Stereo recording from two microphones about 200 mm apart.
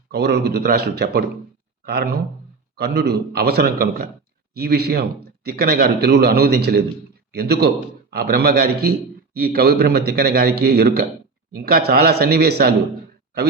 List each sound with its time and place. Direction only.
0.1 s a man's voice: 55° right (ahead or behind)